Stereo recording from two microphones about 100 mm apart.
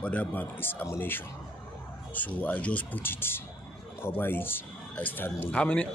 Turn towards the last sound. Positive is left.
turn(degrees=10)  # may be behind; listen again after turning